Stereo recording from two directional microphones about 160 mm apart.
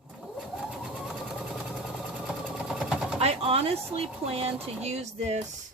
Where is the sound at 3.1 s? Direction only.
40° right (ahead or behind).